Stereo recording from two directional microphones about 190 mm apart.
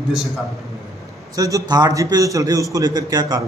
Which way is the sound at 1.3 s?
20° right (ahead or behind).